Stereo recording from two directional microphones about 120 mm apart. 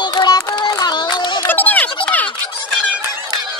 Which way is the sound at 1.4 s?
15° left (ahead or behind).